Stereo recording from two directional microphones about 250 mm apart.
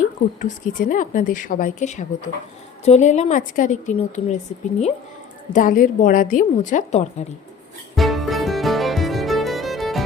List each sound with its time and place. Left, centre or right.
0.0 s a woman's voice: left
5.5 s a woman's voice: left
7.9 s music: centre